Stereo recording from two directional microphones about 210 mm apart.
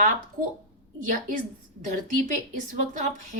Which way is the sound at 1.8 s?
35° right (ahead or behind).